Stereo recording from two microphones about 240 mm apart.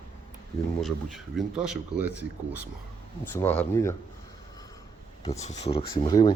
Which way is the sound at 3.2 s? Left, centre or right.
Centre.